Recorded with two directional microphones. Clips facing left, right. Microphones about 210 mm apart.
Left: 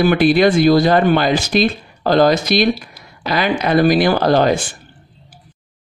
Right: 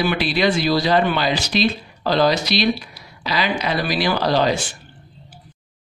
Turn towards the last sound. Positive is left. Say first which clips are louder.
# left 5 dB
turn(degrees=50)  # may be behind; listen again after turning